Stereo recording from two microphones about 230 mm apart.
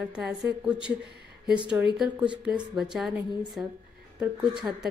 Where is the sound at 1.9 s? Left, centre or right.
Centre.